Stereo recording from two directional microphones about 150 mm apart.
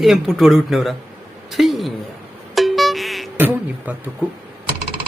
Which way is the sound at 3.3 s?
10° right (ahead or behind).